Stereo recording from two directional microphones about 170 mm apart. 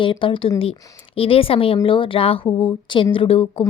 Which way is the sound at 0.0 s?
30° left (ahead or behind).